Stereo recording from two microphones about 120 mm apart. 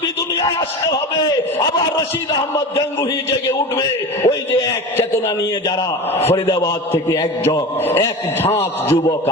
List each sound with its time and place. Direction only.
7.9 s a man's voice: 20° left (ahead or behind)